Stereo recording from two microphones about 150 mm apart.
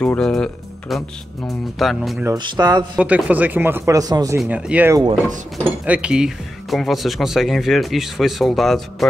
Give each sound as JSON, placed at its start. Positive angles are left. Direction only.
{"t": 0.0, "sound": "speech", "side_deg": 5}
{"t": 2.3, "sound": "speech", "side_deg": -30}
{"t": 3.0, "sound": "speech", "side_deg": -10}
{"t": 4.4, "sound": "speech", "side_deg": -5}